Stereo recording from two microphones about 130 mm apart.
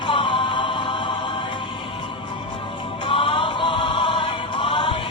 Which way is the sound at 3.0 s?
40° left (ahead or behind).